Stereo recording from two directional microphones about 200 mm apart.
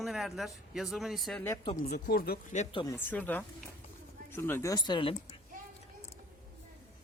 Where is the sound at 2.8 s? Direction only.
10° left (ahead or behind).